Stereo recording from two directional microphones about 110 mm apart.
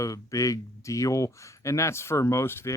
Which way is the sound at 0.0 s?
30° left (ahead or behind).